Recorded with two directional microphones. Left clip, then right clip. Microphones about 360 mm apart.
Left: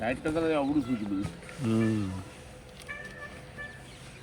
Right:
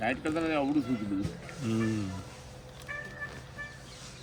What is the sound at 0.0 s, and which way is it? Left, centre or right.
Speech, centre.